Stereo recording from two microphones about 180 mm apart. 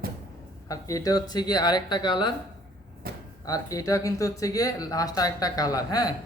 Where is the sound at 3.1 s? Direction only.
60° right (ahead or behind).